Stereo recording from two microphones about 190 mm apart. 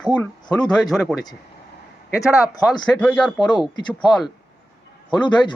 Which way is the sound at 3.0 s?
5° left (ahead or behind).